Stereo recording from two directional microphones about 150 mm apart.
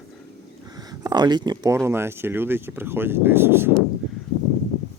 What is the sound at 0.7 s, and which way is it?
Speech, 25° right (ahead or behind).